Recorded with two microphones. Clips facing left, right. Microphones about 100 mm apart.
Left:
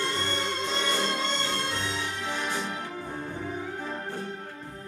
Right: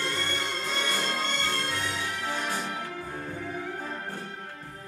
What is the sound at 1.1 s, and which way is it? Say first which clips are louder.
Music: left 1 dB; 50° right (ahead or behind).